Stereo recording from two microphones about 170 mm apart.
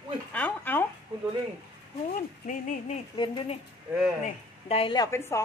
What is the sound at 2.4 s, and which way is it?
Speech, 45° left (ahead or behind).